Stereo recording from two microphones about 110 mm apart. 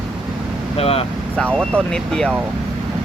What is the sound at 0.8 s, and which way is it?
Speech, 65° left (ahead or behind).